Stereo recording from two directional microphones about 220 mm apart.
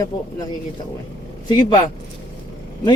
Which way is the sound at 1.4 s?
20° left (ahead or behind).